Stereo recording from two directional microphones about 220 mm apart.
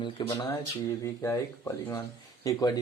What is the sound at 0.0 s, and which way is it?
Speech, 20° left (ahead or behind).